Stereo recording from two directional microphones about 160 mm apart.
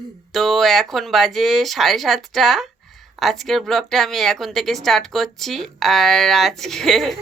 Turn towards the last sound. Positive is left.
turn(degrees=0)  # may be behind; listen again after turning